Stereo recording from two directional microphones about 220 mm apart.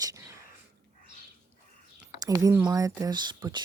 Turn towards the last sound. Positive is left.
turn(degrees=-20)  # may be behind; listen again after turning